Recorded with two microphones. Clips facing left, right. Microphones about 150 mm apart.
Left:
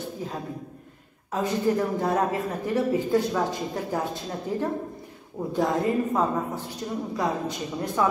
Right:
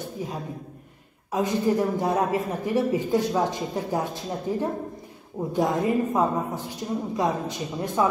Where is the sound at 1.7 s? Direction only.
20° right (ahead or behind).